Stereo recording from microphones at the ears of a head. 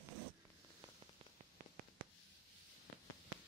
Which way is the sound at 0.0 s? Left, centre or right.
Right.